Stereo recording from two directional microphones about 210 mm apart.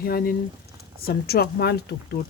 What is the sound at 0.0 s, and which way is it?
Speech, 45° left (ahead or behind).